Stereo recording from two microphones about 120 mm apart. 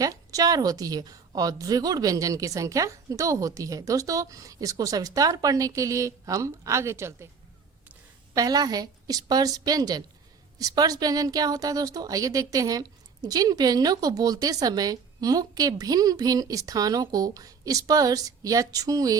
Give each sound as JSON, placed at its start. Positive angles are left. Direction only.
{"t": 0.0, "sound": "a woman's voice", "side_deg": -30}
{"t": 8.4, "sound": "a woman's voice", "side_deg": -30}